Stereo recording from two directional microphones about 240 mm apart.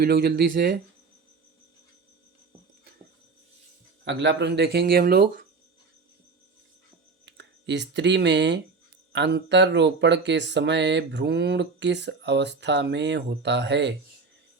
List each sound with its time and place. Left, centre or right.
0.0 s speech: right
4.0 s speech: right
7.3 s speech: right